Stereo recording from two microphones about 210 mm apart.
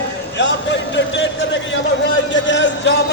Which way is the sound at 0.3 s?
55° left (ahead or behind).